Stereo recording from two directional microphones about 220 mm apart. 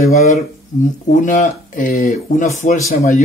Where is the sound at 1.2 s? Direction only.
35° left (ahead or behind).